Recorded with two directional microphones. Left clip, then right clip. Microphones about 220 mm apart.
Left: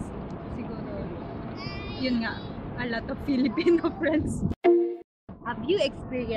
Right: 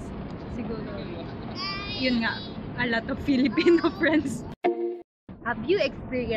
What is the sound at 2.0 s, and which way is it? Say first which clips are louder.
A woman's voice: right 3 dB; 15° right (ahead or behind).